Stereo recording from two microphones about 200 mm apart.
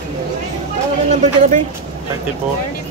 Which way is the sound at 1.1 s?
35° right (ahead or behind).